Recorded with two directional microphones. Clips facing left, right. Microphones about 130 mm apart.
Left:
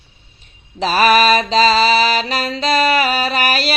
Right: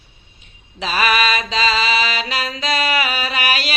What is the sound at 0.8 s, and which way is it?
Mantra, 35° left (ahead or behind).